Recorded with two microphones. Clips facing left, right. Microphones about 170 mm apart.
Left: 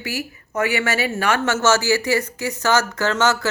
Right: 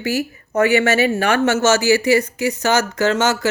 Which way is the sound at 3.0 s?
20° right (ahead or behind).